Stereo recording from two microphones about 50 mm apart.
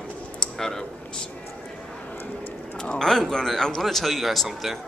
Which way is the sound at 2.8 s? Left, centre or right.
Centre.